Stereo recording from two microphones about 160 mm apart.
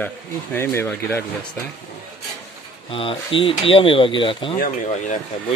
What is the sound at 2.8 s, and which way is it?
Speech, 35° left (ahead or behind).